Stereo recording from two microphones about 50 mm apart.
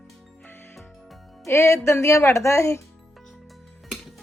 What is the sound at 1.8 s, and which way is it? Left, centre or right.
Speech, left.